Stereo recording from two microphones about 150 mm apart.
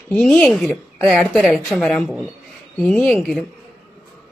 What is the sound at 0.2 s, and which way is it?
A woman's voice, 5° left (ahead or behind).